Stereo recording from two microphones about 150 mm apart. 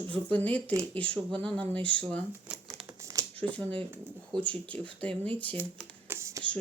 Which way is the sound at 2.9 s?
20° right (ahead or behind).